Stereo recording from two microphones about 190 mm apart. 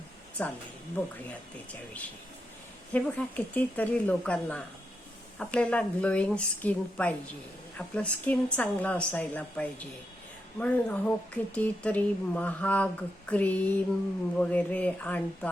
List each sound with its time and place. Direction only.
0.4 s speech: 5° left (ahead or behind)
2.9 s speech: 5° left (ahead or behind)